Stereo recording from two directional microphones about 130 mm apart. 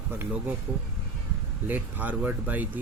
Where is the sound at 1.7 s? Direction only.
15° right (ahead or behind).